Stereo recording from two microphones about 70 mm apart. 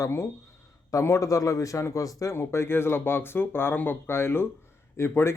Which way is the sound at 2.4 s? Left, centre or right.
Left.